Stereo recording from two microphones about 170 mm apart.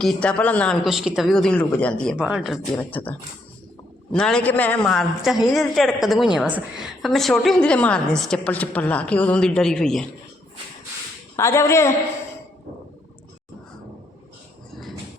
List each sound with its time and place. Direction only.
0.0 s a man's voice: 5° left (ahead or behind)
2.1 s a man's voice: 5° right (ahead or behind)
2.7 s a woman's voice: 10° left (ahead or behind)
11.3 s a woman's voice: 15° left (ahead or behind)